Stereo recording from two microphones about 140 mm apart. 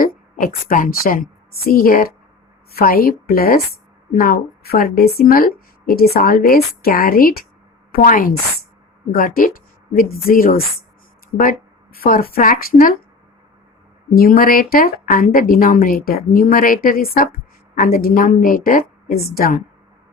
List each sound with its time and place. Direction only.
0.0 s a woman's voice: 85° left
7.9 s speech: 75° left (ahead or behind)
9.1 s speech: 85° left
14.1 s speech: 90° left